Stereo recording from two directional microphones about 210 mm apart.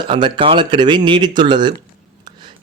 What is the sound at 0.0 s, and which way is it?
A man's voice, 20° right (ahead or behind).